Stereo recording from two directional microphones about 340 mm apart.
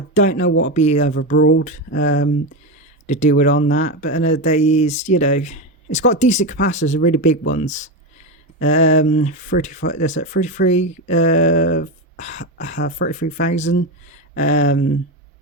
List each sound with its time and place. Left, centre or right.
0.1 s speech: left
0.4 s speech: left
0.7 s speech: centre
1.1 s speech: left